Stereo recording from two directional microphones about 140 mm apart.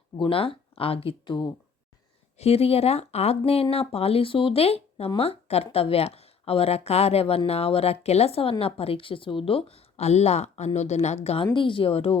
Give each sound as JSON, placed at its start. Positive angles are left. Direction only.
{"t": 0.2, "sound": "speech", "side_deg": 40}
{"t": 2.4, "sound": "speech", "side_deg": 45}
{"t": 11.5, "sound": "speech", "side_deg": 35}